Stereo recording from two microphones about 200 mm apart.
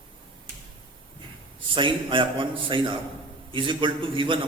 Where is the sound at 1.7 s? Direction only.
25° right (ahead or behind).